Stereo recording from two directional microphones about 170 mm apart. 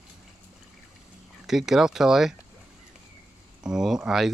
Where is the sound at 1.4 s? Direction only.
Centre (ahead or behind).